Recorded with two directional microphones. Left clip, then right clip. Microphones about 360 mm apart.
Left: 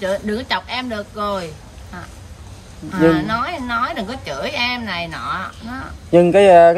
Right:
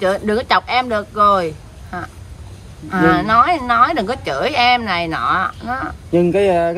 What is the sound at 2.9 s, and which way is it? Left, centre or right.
A woman's voice, centre.